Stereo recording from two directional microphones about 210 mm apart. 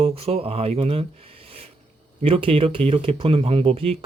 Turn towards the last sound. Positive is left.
turn(degrees=-30)  # may be behind; listen again after turning